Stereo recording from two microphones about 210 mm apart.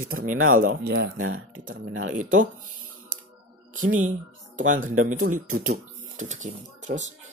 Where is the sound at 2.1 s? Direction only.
40° right (ahead or behind).